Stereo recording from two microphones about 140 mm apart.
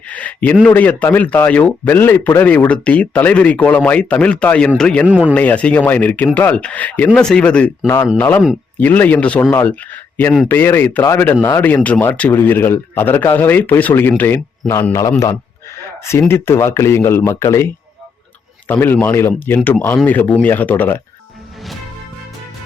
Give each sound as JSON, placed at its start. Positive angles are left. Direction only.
{"t": 0.1, "sound": "a sound", "side_deg": 10}
{"t": 0.6, "sound": "a man's voice", "side_deg": 10}
{"t": 5.0, "sound": "speech", "side_deg": -10}
{"t": 5.3, "sound": "a man's voice", "side_deg": 10}
{"t": 7.9, "sound": "a man's voice", "side_deg": 20}
{"t": 16.3, "sound": "speech", "side_deg": 20}
{"t": 18.7, "sound": "a man's voice", "side_deg": 15}